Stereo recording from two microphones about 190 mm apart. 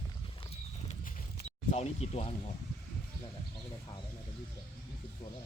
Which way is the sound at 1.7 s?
35° left (ahead or behind).